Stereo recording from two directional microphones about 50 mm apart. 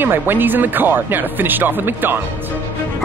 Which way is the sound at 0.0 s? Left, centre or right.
Right.